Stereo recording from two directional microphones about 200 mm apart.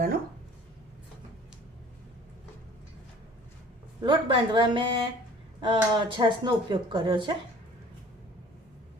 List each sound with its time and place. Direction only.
4.0 s speech: 25° right (ahead or behind)